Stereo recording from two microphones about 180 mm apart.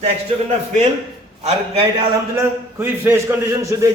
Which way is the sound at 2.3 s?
10° right (ahead or behind).